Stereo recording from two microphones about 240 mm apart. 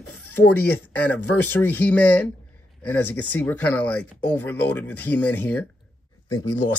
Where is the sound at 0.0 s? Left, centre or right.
Left.